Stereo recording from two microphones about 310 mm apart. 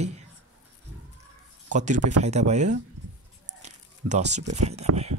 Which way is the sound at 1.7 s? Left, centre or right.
Right.